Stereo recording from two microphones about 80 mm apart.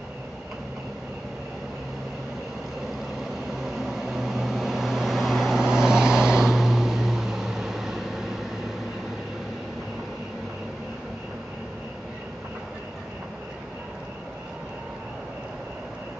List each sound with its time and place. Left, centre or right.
3.6 s vehicle: centre